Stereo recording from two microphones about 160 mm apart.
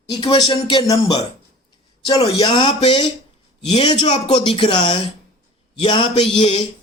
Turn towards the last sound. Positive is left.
turn(degrees=30)  # may be behind; listen again after turning